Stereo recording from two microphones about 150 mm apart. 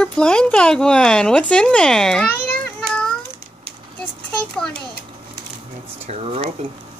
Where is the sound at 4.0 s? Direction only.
5° left (ahead or behind).